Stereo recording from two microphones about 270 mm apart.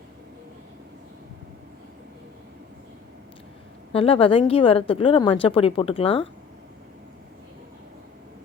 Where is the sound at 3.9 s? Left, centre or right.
Left.